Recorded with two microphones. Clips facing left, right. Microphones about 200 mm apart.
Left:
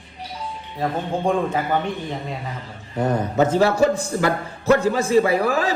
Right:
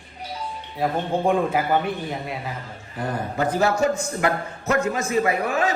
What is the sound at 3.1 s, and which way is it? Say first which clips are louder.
A man's voice: left 5 dB; 30° left (ahead or behind).